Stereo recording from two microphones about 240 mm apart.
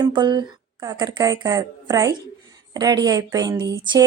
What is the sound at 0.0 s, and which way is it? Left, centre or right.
A woman's voice, centre.